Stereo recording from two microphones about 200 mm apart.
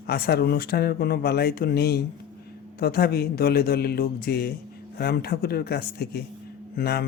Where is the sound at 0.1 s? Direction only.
50° left (ahead or behind).